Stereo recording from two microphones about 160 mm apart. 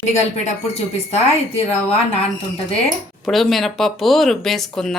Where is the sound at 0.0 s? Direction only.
45° left (ahead or behind).